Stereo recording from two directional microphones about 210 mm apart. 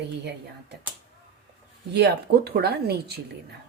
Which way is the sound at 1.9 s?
50° right (ahead or behind).